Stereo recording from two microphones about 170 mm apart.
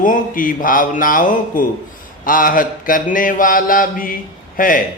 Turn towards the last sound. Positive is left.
turn(degrees=55)  # may be behind; listen again after turning